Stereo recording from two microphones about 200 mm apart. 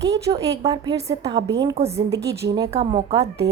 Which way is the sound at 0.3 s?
15° right (ahead or behind).